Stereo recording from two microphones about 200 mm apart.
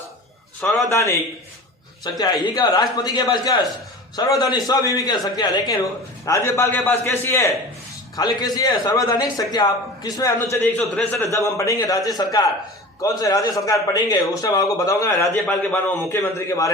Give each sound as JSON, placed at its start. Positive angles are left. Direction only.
{"t": 0.6, "sound": "a man's voice", "side_deg": 0}
{"t": 0.9, "sound": "a man's voice", "side_deg": 15}
{"t": 2.1, "sound": "a man's voice", "side_deg": 20}